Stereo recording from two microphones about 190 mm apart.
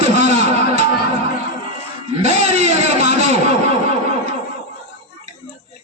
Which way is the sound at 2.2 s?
35° right (ahead or behind).